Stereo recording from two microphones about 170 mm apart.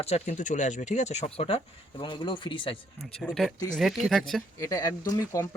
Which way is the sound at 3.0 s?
Centre (ahead or behind).